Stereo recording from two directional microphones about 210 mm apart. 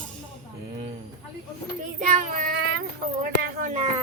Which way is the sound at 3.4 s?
40° right (ahead or behind).